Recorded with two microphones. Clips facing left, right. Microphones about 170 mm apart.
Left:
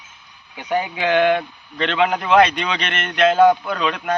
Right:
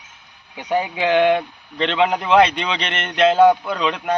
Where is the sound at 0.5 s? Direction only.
25° right (ahead or behind).